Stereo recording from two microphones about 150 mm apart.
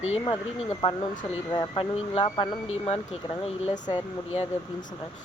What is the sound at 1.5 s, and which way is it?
Speech, 35° left (ahead or behind).